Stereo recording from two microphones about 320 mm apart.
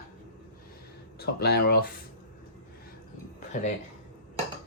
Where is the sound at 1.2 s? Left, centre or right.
Left.